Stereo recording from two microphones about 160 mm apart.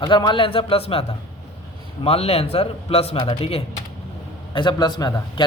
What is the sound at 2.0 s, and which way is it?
A man's voice, 40° left (ahead or behind).